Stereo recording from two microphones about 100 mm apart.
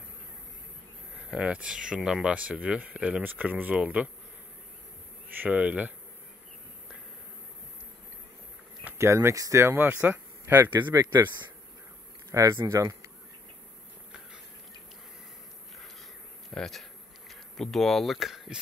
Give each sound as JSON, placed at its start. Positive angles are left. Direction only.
{"t": 1.3, "sound": "speech", "side_deg": -10}
{"t": 5.3, "sound": "speech", "side_deg": -15}
{"t": 8.9, "sound": "speech", "side_deg": -30}
{"t": 10.7, "sound": "speech", "side_deg": -50}
{"t": 12.3, "sound": "speech", "side_deg": -30}
{"t": 16.4, "sound": "speech", "side_deg": 5}